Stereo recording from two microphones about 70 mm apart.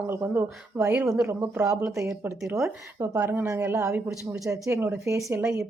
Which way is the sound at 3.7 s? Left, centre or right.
Right.